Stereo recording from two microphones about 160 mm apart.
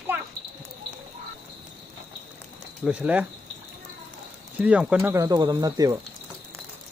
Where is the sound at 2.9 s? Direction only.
10° right (ahead or behind).